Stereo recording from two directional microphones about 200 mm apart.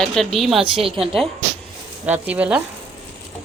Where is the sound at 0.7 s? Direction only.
25° right (ahead or behind).